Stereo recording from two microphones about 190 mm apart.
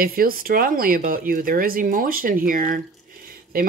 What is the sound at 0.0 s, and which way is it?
Speech, 50° right (ahead or behind).